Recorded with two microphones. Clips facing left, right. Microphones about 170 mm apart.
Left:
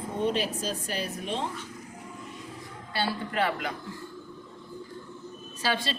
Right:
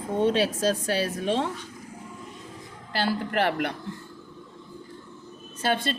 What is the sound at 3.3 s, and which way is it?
Speech, 70° right (ahead or behind).